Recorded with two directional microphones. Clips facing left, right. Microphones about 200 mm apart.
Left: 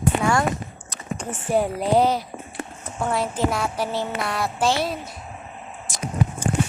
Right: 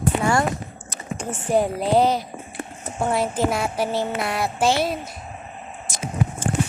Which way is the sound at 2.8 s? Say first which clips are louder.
Right 2 dB; 25° right (ahead or behind).